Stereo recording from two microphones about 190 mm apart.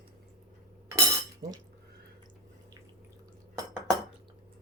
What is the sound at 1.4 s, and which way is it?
Speech, 65° right (ahead or behind).